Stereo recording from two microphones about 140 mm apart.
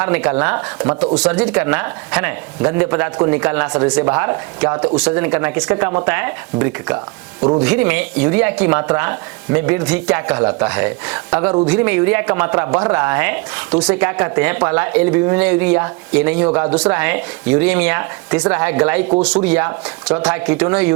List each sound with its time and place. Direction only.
0.0 s speech: 10° right (ahead or behind)